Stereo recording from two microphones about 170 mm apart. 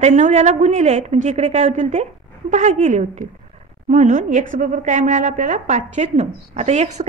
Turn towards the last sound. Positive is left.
turn(degrees=-40)  # may be behind; listen again after turning